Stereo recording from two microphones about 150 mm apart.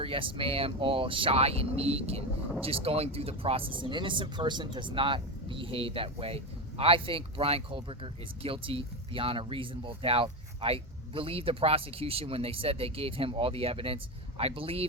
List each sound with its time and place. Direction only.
0.0 s speech: 35° right (ahead or behind)